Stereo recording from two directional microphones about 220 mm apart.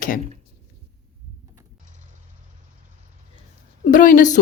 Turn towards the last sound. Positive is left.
turn(degrees=35)  # may be behind; listen again after turning